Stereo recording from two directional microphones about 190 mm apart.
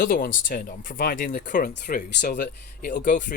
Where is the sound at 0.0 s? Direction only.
45° left (ahead or behind).